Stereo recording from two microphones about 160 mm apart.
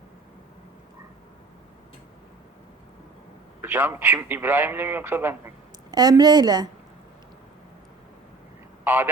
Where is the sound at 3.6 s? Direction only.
15° right (ahead or behind).